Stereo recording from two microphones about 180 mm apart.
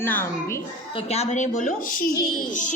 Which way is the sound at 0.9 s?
35° left (ahead or behind).